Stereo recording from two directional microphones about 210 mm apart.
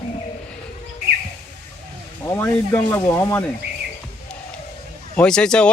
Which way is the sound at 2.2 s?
10° left (ahead or behind).